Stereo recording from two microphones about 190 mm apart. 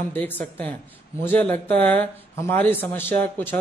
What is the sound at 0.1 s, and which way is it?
A man's voice, 10° left (ahead or behind).